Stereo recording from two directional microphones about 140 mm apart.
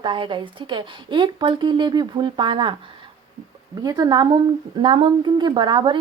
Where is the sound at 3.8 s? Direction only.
30° right (ahead or behind).